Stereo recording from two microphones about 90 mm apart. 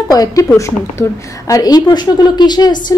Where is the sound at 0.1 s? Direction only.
40° left (ahead or behind).